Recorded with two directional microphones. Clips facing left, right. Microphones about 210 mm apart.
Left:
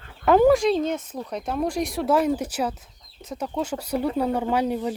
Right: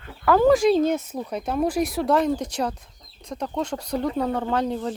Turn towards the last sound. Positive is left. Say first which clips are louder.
# left 1 dB
turn(degrees=10)  # may be behind; listen again after turning